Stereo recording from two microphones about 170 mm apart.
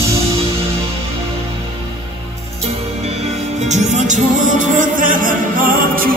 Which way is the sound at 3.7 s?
45° right (ahead or behind).